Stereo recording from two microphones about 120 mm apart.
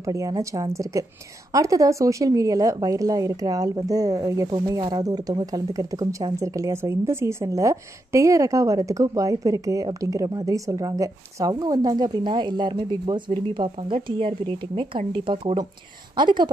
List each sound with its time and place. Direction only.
0.0 s a woman's voice: 30° right (ahead or behind)